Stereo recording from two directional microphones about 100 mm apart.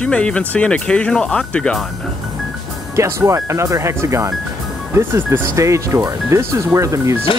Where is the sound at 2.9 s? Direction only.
30° right (ahead or behind).